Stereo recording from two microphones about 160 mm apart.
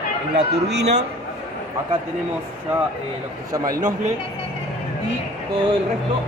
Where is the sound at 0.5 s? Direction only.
90° right.